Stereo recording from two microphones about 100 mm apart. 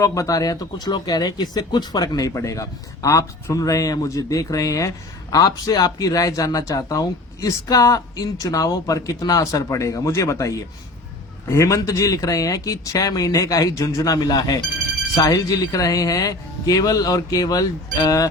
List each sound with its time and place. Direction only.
0.0 s speech: 30° left (ahead or behind)